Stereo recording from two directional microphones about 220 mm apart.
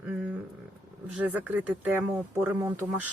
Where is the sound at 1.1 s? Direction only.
5° right (ahead or behind).